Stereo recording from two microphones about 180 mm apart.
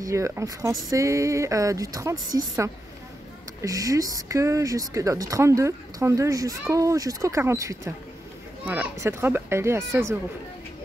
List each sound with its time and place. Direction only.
0.0 s speech: 15° right (ahead or behind)